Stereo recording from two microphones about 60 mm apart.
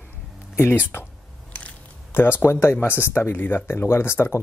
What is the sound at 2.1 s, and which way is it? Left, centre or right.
Speech, left.